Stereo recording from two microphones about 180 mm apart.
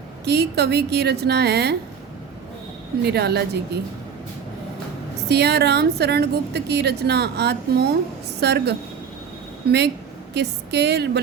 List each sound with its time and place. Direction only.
0.3 s a woman's voice: 65° right (ahead or behind)
3.0 s a woman's voice: 65° right (ahead or behind)
5.3 s a woman's voice: 65° right (ahead or behind)
10.3 s a woman's voice: 65° right (ahead or behind)